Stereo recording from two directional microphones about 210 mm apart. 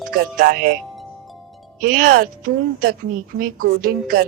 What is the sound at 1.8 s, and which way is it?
A woman's voice, 40° right (ahead or behind).